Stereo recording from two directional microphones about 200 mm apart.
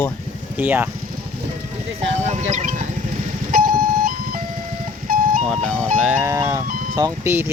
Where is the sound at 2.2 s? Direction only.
35° right (ahead or behind).